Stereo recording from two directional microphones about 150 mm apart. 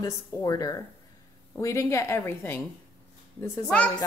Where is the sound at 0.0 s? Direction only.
25° left (ahead or behind).